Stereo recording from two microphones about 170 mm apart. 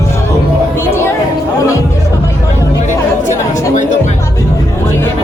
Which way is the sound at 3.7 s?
45° left (ahead or behind).